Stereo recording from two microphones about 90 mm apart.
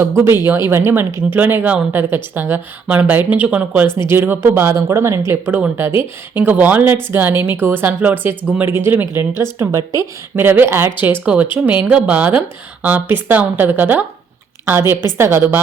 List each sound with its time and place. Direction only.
0.4 s speech: 30° right (ahead or behind)
3.8 s speech: 30° right (ahead or behind)
5.5 s speech: 20° right (ahead or behind); by 10.1 s 35° right (ahead or behind)
10.3 s a woman's voice: 25° right (ahead or behind)